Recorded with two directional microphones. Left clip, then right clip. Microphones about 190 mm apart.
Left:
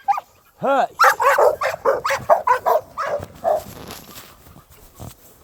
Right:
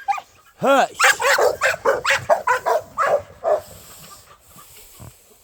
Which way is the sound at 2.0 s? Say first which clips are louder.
Left 2 dB; 20° left (ahead or behind).